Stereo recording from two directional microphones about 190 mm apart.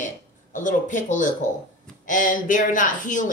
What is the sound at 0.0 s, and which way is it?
A woman's voice, 40° left (ahead or behind).